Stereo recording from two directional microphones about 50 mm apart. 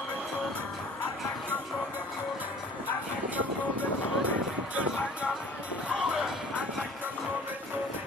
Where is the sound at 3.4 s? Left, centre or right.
Right.